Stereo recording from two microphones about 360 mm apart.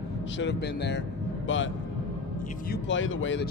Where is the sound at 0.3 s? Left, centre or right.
Left.